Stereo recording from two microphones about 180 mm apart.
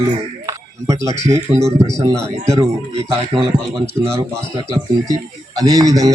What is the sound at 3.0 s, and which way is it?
Speech, 30° right (ahead or behind).